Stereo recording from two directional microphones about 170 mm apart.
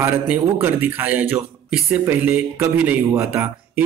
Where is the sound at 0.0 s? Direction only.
10° right (ahead or behind).